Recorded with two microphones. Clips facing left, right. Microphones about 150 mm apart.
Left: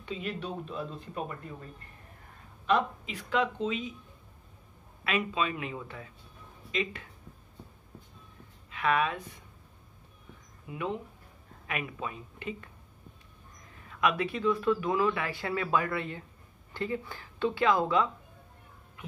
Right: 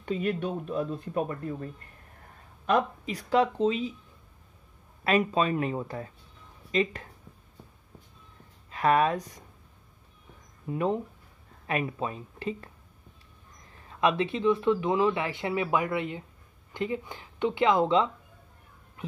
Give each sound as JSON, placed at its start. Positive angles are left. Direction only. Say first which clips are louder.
{"t": 0.0, "sound": "speech", "louder": "right 7 dB", "side_deg": -50}
{"t": 2.6, "sound": "speech", "louder": "right 2 dB", "side_deg": -40}
{"t": 5.0, "sound": "speech", "louder": "right 6 dB", "side_deg": -40}
{"t": 8.6, "sound": "speech", "louder": "right 5 dB", "side_deg": -40}
{"t": 10.7, "sound": "speech", "louder": "right 7 dB", "side_deg": -40}
{"t": 13.8, "sound": "speech", "louder": "right 3 dB", "side_deg": -30}